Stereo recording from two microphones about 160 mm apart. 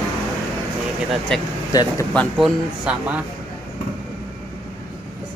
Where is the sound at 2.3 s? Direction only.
5° right (ahead or behind).